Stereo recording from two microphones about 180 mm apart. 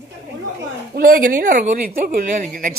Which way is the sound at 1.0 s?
50° right (ahead or behind).